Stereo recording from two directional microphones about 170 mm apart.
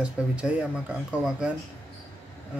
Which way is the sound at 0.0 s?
5° right (ahead or behind).